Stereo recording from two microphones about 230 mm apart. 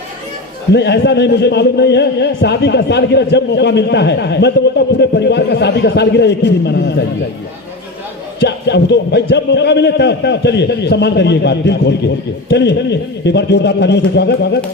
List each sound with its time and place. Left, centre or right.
0.7 s a man's voice: left
8.4 s a man's voice: left